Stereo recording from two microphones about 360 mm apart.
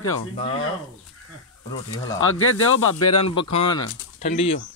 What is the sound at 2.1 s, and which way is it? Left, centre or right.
Speech, left.